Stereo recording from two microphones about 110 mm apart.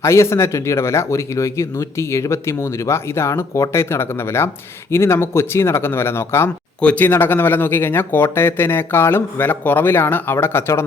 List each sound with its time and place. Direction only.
0.0 s speech: 25° left (ahead or behind)